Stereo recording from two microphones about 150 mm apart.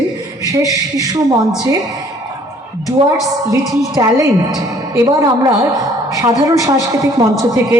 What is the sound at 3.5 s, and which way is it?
A woman's voice, 20° right (ahead or behind).